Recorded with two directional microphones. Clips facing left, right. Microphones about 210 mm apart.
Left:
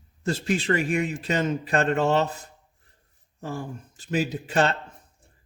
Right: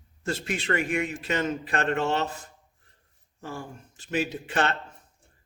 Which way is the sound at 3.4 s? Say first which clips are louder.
Left 4 dB; 40° left (ahead or behind).